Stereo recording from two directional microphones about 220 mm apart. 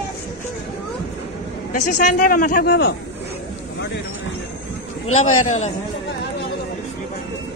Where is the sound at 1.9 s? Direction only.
40° left (ahead or behind).